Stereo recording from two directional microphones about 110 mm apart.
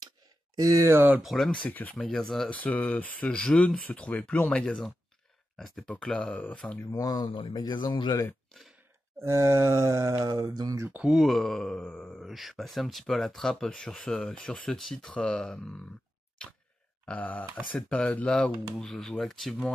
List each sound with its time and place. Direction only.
0.6 s speech: 30° right (ahead or behind)
1.2 s speech: centre (ahead or behind)
2.5 s speech: 15° left (ahead or behind)
6.8 s speech: 35° left (ahead or behind)
7.2 s speech: 50° left (ahead or behind)
9.2 s speech: 25° right (ahead or behind)
10.9 s speech: 5° right (ahead or behind)
17.0 s speech: 15° left (ahead or behind)